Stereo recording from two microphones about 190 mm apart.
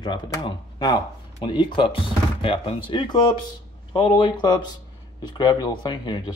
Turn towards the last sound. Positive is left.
turn(degrees=25)  # may be behind; listen again after turning